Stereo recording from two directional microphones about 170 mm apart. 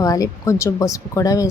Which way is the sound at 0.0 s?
20° left (ahead or behind).